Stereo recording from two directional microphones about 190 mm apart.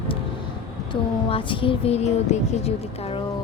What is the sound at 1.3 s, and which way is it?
A woman's voice, 25° left (ahead or behind).